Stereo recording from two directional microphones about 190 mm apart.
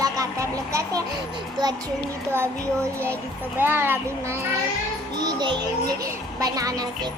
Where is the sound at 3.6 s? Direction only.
10° right (ahead or behind).